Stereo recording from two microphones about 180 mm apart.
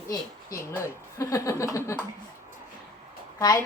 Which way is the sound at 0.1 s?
15° left (ahead or behind).